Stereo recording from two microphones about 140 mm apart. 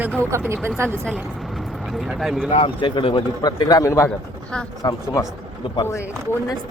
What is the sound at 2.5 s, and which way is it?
A man's voice, 35° left (ahead or behind).